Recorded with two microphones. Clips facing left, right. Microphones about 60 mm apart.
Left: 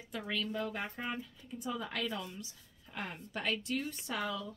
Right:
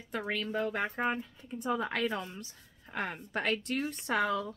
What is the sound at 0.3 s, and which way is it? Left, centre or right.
Speech, right.